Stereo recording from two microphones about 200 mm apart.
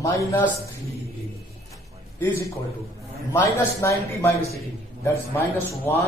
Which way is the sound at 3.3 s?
15° left (ahead or behind).